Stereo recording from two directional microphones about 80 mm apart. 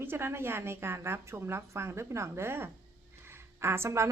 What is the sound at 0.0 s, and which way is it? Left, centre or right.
A woman's voice, right.